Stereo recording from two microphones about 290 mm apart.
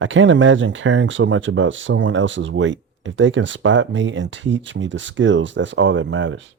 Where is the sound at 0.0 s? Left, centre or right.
Right.